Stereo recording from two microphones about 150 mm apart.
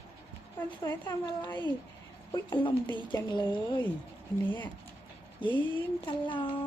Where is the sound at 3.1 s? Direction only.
30° left (ahead or behind).